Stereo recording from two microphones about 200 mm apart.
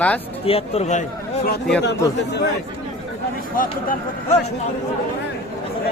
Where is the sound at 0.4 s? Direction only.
30° left (ahead or behind).